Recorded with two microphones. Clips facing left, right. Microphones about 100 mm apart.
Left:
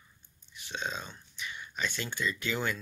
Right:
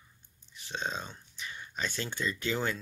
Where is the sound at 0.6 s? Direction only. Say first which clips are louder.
Right 1 dB; 35° right (ahead or behind).